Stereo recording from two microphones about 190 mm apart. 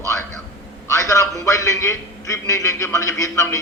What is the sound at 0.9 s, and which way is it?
A man's voice, 15° left (ahead or behind).